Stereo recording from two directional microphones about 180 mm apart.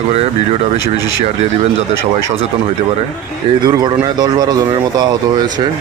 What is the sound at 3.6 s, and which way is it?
Speech, 20° right (ahead or behind).